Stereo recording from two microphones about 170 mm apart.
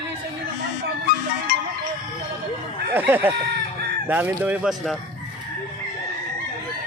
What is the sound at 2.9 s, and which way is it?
Speech, 10° right (ahead or behind).